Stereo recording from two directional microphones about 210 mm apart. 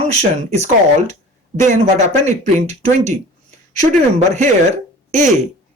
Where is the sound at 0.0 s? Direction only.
30° right (ahead or behind).